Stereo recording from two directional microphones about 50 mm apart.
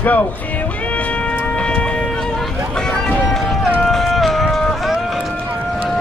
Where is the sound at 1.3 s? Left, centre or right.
Left.